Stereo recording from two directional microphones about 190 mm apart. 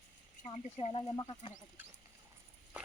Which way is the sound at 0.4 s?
35° left (ahead or behind).